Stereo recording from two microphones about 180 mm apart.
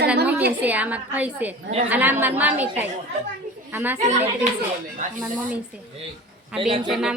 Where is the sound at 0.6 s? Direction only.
10° right (ahead or behind).